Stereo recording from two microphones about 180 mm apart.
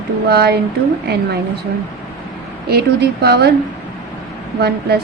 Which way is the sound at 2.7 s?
60° right (ahead or behind).